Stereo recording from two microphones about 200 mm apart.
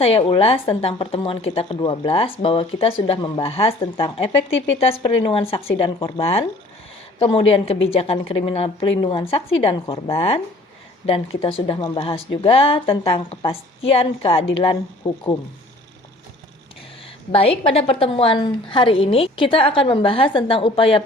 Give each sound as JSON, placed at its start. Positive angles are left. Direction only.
{"t": 0.0, "sound": "a woman's voice", "side_deg": 30}
{"t": 17.3, "sound": "a woman's voice", "side_deg": 30}